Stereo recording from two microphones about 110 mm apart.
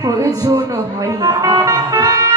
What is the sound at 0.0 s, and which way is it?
Speech, 30° right (ahead or behind).